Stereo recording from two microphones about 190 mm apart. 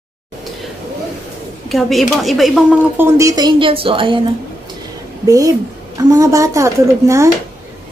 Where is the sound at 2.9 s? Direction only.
15° right (ahead or behind).